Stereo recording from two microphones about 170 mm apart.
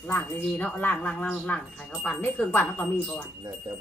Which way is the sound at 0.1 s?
10° left (ahead or behind).